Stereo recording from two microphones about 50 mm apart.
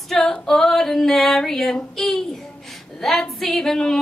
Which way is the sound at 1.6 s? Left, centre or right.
Centre.